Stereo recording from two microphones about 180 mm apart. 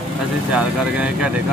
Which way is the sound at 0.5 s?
5° right (ahead or behind).